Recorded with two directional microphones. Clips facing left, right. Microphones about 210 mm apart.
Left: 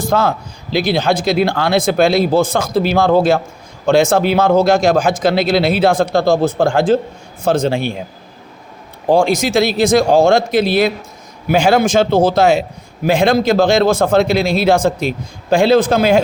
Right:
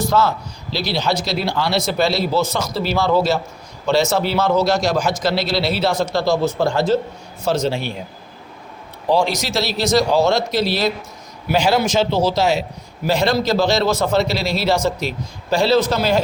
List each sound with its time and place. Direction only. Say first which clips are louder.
0.0 s a man's voice: left 2 dB; 50° left (ahead or behind)
9.0 s a man's voice: left 5 dB; 50° left (ahead or behind)